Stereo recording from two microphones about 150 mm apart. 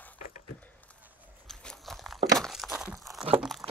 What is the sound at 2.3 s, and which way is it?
Tearing, centre (ahead or behind).